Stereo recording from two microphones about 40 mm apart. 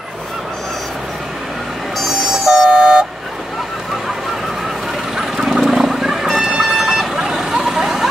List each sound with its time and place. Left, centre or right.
2.3 s vehicle: centre
5.1 s vehicle: centre